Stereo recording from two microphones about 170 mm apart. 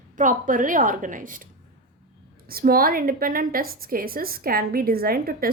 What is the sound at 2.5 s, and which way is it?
A woman's voice, 60° right (ahead or behind).